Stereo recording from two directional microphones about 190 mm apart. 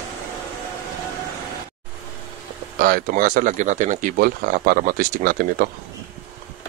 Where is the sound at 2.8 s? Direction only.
50° right (ahead or behind).